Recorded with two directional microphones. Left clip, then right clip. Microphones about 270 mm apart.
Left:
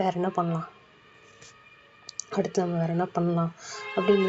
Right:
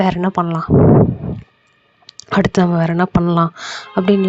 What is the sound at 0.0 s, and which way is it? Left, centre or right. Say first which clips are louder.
Speech: right 9 dB; right.